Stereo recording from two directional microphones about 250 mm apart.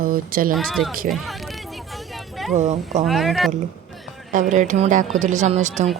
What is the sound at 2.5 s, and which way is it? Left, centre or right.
Speech, right.